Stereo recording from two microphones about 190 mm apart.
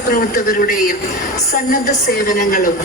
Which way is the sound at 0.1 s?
50° left (ahead or behind).